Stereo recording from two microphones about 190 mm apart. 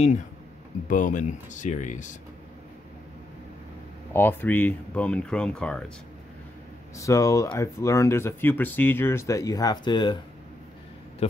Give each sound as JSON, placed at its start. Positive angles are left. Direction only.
{"t": 0.8, "sound": "speech", "side_deg": 40}
{"t": 4.1, "sound": "speech", "side_deg": 10}
{"t": 7.0, "sound": "speech", "side_deg": 15}